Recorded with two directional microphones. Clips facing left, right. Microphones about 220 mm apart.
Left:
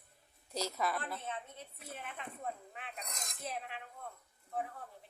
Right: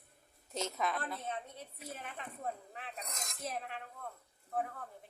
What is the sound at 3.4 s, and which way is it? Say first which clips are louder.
Cutlery: right 2 dB; 45° right (ahead or behind).